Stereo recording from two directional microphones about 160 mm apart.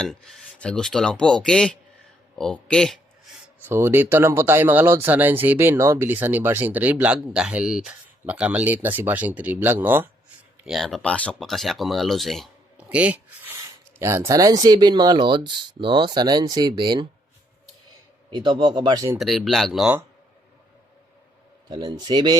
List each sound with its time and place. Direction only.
0.0 s speech: 5° left (ahead or behind)
3.7 s speech: 15° right (ahead or behind)
10.7 s speech: centre (ahead or behind)
14.0 s speech: 20° right (ahead or behind)
18.3 s speech: 30° right (ahead or behind)
19.2 s speech: centre (ahead or behind)
21.7 s speech: 25° right (ahead or behind)